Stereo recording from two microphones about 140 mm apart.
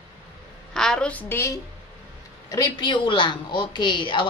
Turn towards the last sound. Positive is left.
turn(degrees=35)  # may be behind; listen again after turning